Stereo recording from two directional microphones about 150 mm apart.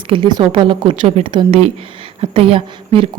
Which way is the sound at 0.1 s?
30° right (ahead or behind).